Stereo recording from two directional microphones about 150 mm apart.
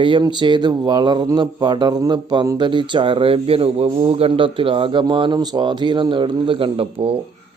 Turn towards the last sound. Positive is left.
turn(degrees=-30)  # may be behind; listen again after turning